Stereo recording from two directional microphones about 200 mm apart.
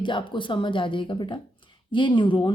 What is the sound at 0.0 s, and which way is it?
A woman's voice, 25° left (ahead or behind).